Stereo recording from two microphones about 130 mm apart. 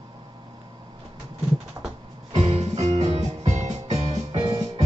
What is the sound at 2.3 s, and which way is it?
Music, 55° right (ahead or behind).